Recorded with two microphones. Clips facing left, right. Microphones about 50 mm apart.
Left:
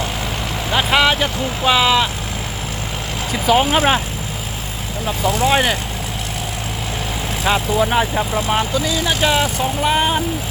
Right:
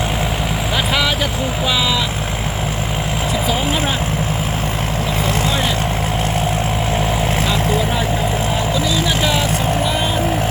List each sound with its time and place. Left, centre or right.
0.7 s speech: centre
3.4 s speech: left
5.2 s speech: right
5.5 s speech: left
7.4 s speech: left
8.4 s speech: left
9.0 s speech: left